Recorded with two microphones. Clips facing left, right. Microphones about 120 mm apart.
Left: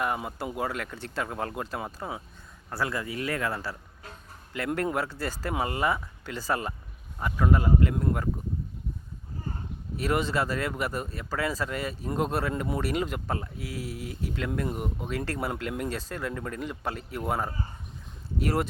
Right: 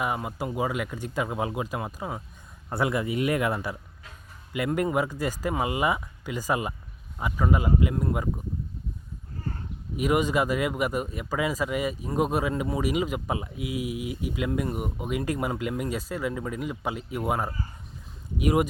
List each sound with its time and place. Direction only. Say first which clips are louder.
0.0 s speech: right 1 dB; 5° right (ahead or behind)
2.6 s speech: right 5 dB; 20° right (ahead or behind); by 8.2 s 5° right (ahead or behind)
10.0 s speech: right 3 dB; 10° right (ahead or behind)